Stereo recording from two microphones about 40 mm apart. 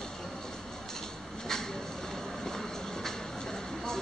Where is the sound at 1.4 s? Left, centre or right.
Centre.